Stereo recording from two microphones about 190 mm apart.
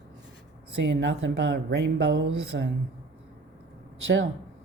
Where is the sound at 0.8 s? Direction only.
70° right (ahead or behind).